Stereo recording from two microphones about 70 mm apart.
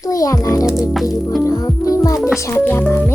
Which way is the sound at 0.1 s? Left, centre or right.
Left.